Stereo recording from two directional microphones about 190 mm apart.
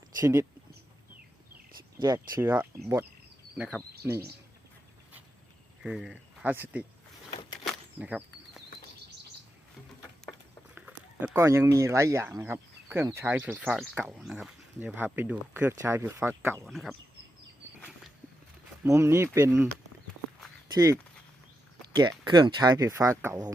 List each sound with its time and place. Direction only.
0.2 s speech: 15° right (ahead or behind)
2.0 s speech: 20° right (ahead or behind)
2.4 s speech: 10° right (ahead or behind)
5.8 s speech: 5° right (ahead or behind)
7.6 s a sound: 5° right (ahead or behind)
10.8 s speech: 10° right (ahead or behind)
16.6 s speech: centre (ahead or behind)
17.7 s a sound: 5° left (ahead or behind)
18.9 s speech: 15° right (ahead or behind)
20.7 s speech: 15° right (ahead or behind)
22.2 s speech: 25° right (ahead or behind)